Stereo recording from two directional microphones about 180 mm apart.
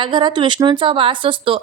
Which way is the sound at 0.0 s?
25° right (ahead or behind).